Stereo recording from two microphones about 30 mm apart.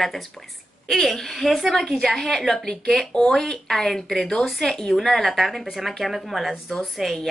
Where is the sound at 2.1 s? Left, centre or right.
Centre.